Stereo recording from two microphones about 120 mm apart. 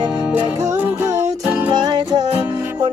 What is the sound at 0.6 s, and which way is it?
Music, 25° right (ahead or behind).